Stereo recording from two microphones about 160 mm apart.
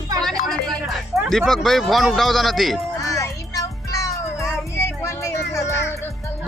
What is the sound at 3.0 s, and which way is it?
Music, 20° left (ahead or behind).